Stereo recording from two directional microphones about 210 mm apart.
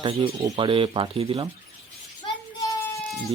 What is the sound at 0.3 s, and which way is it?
Speech, 20° right (ahead or behind).